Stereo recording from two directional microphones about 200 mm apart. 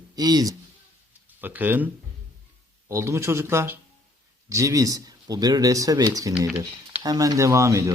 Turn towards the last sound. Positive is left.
turn(degrees=-15)  # may be behind; listen again after turning